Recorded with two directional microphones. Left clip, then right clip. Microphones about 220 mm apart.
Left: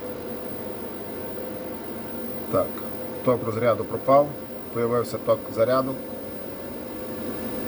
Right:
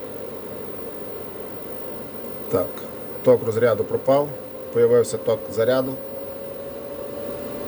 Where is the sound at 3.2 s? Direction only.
25° right (ahead or behind).